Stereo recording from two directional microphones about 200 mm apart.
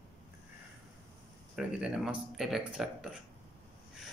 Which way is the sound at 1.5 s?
5° right (ahead or behind).